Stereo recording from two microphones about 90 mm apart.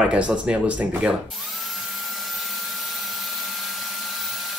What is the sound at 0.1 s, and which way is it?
Speech, 15° right (ahead or behind).